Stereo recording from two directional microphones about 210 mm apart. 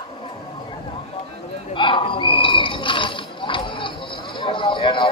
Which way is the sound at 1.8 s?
25° left (ahead or behind).